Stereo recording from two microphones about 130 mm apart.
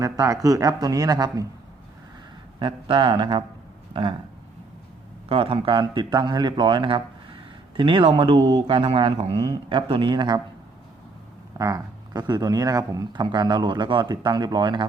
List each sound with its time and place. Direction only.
0.0 s speech: 25° right (ahead or behind)
2.6 s speech: 40° right (ahead or behind)
5.3 s speech: 45° right (ahead or behind)
11.5 s speech: 30° right (ahead or behind)